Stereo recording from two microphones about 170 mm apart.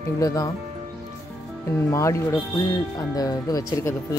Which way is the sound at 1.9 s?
15° left (ahead or behind).